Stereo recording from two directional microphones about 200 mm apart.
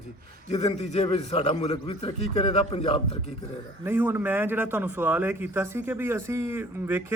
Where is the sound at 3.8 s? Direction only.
10° right (ahead or behind).